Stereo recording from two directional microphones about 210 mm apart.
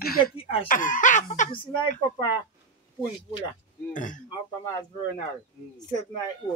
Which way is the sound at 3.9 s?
35° left (ahead or behind).